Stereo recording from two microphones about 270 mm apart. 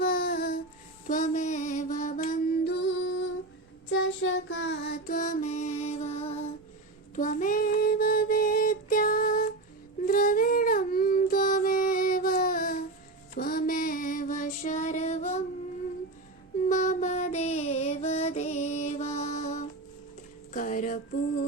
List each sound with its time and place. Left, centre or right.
0.0 s a sound: left
1.0 s mantra: left
3.8 s music: left
7.2 s child singing: left
10.1 s a sound: left
13.3 s music: left
16.6 s music: left